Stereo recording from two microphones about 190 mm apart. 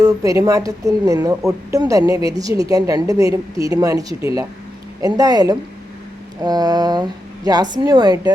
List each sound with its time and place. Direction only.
0.0 s a woman's voice: 15° right (ahead or behind)